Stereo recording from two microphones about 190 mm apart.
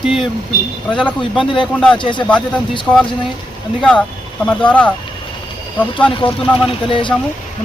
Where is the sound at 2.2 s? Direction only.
5° left (ahead or behind).